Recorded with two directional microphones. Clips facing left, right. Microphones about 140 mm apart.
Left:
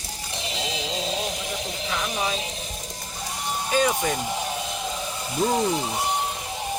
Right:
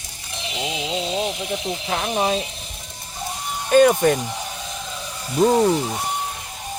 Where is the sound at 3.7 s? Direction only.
55° right (ahead or behind).